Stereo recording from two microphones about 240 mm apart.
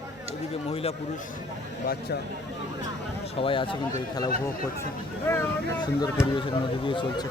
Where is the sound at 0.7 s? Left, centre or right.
Left.